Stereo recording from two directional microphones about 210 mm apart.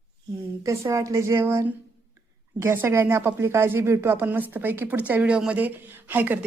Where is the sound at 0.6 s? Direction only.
15° right (ahead or behind).